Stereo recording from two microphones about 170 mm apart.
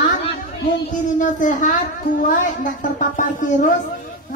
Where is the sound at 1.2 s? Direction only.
50° left (ahead or behind).